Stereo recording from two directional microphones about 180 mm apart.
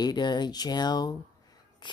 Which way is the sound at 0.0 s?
25° left (ahead or behind).